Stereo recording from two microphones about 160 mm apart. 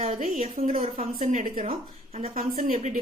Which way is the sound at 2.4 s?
60° right (ahead or behind).